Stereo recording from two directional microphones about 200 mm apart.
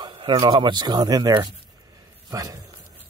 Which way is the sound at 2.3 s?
15° right (ahead or behind).